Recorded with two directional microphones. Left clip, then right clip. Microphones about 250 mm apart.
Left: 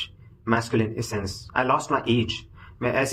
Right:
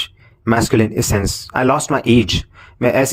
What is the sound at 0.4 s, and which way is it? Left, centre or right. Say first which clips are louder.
Speech: right 9 dB; right.